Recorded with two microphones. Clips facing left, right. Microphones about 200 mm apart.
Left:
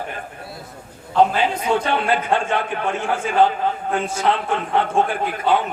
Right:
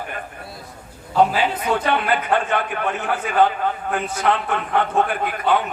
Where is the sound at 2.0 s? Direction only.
25° left (ahead or behind).